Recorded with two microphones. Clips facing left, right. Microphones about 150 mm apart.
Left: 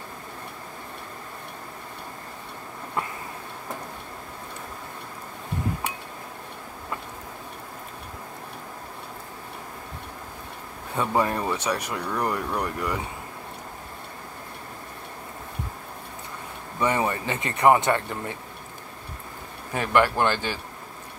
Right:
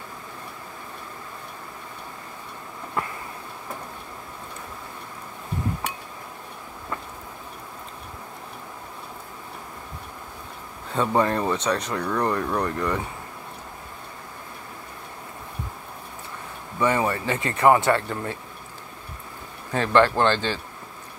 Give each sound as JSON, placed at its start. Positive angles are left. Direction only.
{"t": 11.0, "sound": "speech", "side_deg": 10}
{"t": 16.8, "sound": "speech", "side_deg": 20}
{"t": 19.7, "sound": "speech", "side_deg": 15}